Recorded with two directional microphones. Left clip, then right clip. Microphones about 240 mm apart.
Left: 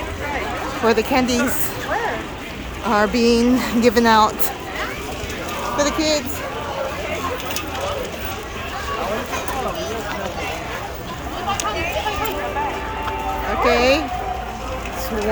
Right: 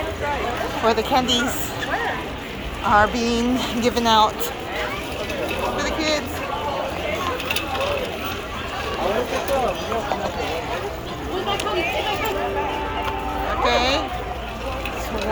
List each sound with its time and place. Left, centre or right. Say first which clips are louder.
0.9 s speech: left 1 dB; left
2.9 s speech: left 1 dB; left
5.7 s a sound: left 7 dB; centre
13.7 s speech: left 4 dB; left